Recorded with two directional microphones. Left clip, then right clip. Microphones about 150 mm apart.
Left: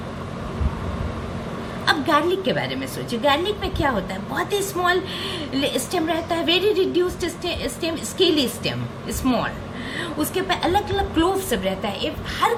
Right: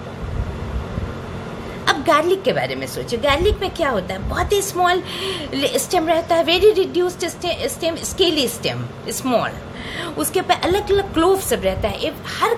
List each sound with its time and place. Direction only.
1.8 s a woman's voice: 65° right (ahead or behind)